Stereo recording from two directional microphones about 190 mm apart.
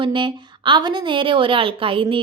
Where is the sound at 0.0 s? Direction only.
25° right (ahead or behind).